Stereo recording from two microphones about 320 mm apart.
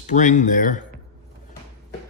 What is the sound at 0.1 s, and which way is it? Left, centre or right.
Speech, left.